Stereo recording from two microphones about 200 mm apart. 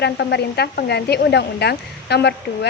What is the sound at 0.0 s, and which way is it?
Speech, 55° left (ahead or behind).